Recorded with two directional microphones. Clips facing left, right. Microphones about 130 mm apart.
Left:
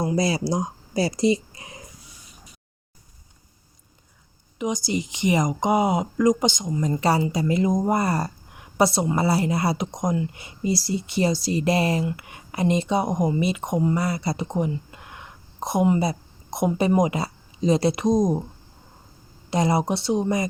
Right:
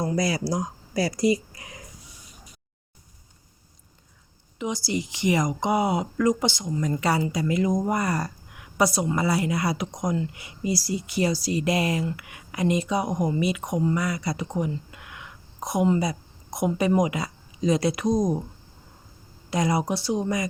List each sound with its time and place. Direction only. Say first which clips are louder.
0.2 s speech: left 2 dB; 25° left (ahead or behind)
4.5 s speech: left 2 dB; 15° left (ahead or behind)
6.8 s a woman's voice: left 3 dB; 30° left (ahead or behind)
19.5 s speech: left 2 dB; 25° left (ahead or behind)